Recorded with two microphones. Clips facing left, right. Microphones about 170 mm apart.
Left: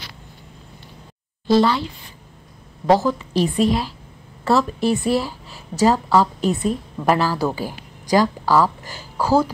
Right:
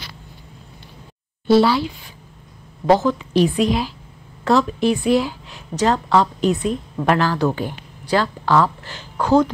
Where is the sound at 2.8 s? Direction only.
Centre (ahead or behind).